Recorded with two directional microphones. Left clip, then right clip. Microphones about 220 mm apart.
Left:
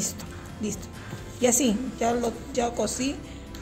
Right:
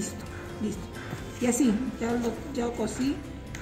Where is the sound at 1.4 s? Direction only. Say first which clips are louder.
Left 3 dB; 40° left (ahead or behind).